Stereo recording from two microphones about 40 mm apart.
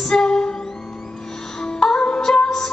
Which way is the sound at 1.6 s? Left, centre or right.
Centre.